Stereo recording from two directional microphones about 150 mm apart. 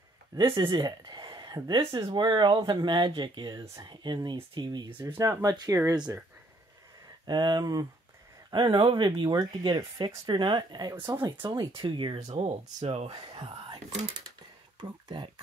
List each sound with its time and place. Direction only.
0.4 s speech: 25° right (ahead or behind)
3.6 s speech: 20° right (ahead or behind)
3.9 s speech: 30° right (ahead or behind)
7.2 s speech: 30° right (ahead or behind)
12.4 s speech: 45° right (ahead or behind)